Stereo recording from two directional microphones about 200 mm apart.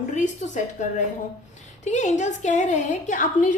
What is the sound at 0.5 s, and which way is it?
A woman's voice, 40° left (ahead or behind).